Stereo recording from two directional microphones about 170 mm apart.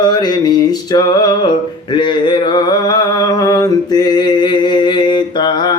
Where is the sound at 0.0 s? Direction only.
25° left (ahead or behind).